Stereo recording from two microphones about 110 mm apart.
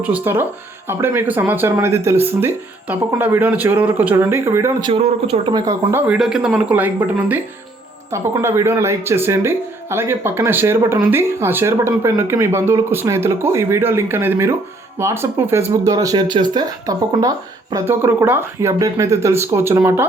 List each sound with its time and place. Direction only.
0.0 s speech: 15° right (ahead or behind)
4.8 s speech: 50° right (ahead or behind)
6.1 s speech: 5° right (ahead or behind)
8.1 s speech: 25° right (ahead or behind)
17.8 s speech: 20° right (ahead or behind)